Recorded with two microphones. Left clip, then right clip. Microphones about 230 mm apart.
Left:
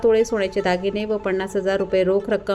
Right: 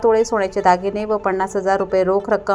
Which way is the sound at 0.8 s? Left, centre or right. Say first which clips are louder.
Right 2 dB; right.